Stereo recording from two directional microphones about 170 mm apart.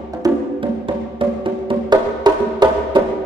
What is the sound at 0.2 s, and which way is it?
Music, 20° right (ahead or behind).